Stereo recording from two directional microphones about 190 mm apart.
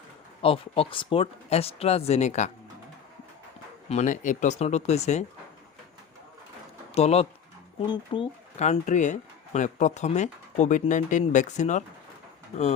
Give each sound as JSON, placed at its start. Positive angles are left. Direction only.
{"t": 0.4, "sound": "speech", "side_deg": 30}
{"t": 3.8, "sound": "speech", "side_deg": 40}
{"t": 6.9, "sound": "speech", "side_deg": 35}